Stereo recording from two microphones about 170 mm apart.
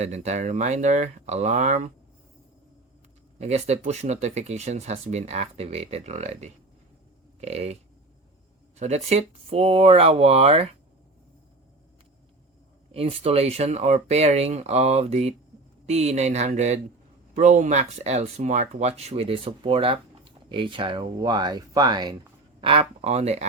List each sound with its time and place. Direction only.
0.0 s speech: 40° right (ahead or behind)
3.3 s speech: 40° right (ahead or behind)
8.8 s speech: 40° right (ahead or behind)
12.9 s speech: 35° right (ahead or behind)